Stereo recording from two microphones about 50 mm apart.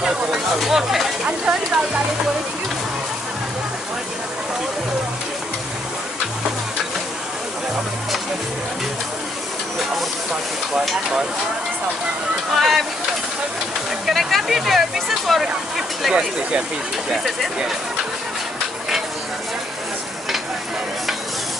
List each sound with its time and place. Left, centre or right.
0.0 s a sound: centre
1.2 s speech: centre
12.5 s speech: centre
14.0 s speech: centre